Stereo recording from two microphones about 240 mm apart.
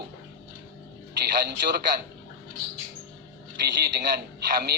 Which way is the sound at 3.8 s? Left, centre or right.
Right.